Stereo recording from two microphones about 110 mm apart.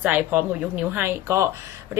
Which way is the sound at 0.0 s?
15° right (ahead or behind).